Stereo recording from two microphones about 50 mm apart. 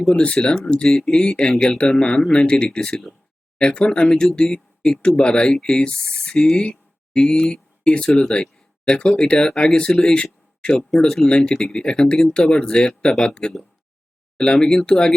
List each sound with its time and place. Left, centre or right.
0.1 s speech: left
6.7 s a sound: centre
7.9 s speech: centre
10.9 s speech: centre